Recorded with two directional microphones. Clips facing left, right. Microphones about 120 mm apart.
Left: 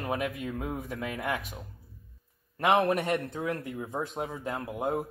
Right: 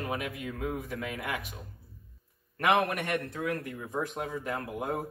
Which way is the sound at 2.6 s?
30° left (ahead or behind).